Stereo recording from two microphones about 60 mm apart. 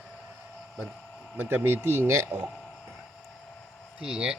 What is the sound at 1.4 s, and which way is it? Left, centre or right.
Speech, right.